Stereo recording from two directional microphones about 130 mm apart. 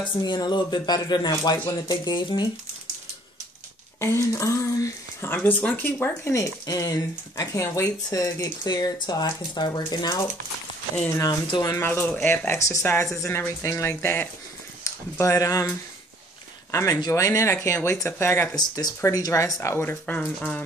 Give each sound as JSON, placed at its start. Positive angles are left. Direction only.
{"t": 0.2, "sound": "speech", "side_deg": 30}
{"t": 4.0, "sound": "speech", "side_deg": 20}
{"t": 6.6, "sound": "speech", "side_deg": 25}
{"t": 11.7, "sound": "speech", "side_deg": 15}
{"t": 16.7, "sound": "speech", "side_deg": 25}
{"t": 18.6, "sound": "speech", "side_deg": 30}